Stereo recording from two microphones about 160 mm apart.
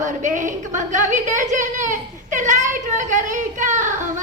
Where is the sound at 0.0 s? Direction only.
50° right (ahead or behind).